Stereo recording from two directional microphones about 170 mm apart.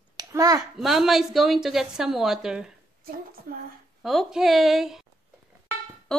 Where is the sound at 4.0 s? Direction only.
Centre (ahead or behind).